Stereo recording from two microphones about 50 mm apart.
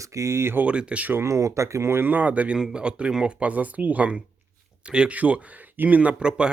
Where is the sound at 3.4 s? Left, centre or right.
Right.